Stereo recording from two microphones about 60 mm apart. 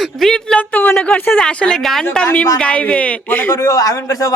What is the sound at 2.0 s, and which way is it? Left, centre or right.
Speech, centre.